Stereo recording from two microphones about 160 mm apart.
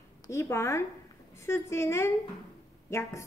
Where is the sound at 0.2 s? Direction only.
20° left (ahead or behind).